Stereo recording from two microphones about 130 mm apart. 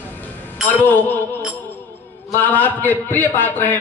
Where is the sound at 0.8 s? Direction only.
15° left (ahead or behind).